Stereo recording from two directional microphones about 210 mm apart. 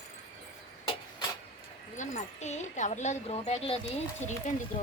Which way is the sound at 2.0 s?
35° left (ahead or behind).